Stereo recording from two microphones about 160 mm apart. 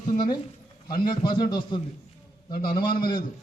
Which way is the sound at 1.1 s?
30° left (ahead or behind).